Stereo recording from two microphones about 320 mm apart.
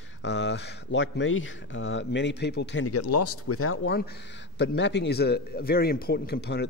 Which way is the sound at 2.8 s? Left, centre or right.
Left.